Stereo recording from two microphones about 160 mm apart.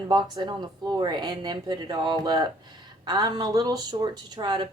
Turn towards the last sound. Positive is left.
turn(degrees=-30)  # may be behind; listen again after turning